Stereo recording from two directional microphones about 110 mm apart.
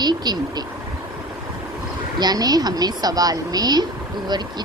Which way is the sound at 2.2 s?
35° right (ahead or behind).